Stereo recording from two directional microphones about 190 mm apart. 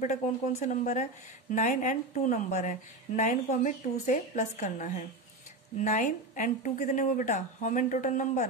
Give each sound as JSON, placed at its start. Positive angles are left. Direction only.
{"t": 0.0, "sound": "a woman's voice", "side_deg": 40}